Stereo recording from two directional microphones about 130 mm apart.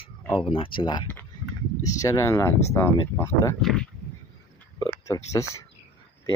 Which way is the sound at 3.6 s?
Centre (ahead or behind).